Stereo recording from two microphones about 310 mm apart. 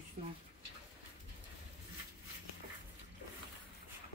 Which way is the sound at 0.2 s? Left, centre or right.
Right.